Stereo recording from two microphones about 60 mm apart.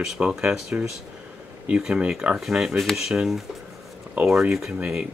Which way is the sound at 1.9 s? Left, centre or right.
Right.